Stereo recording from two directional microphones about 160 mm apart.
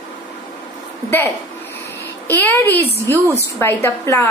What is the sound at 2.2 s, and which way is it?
A woman's voice, 10° left (ahead or behind).